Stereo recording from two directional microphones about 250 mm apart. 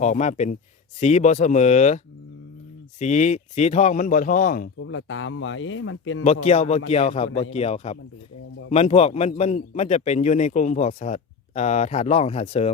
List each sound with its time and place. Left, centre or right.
0.0 s a man's voice: left
3.0 s a man's voice: left
4.8 s speech: left
6.2 s a man's voice: left